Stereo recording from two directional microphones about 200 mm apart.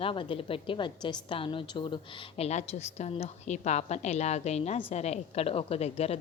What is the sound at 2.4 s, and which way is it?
A woman's voice, 35° left (ahead or behind).